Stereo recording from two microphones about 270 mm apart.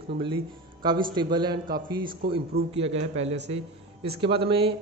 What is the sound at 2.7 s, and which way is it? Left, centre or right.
A man's voice, right.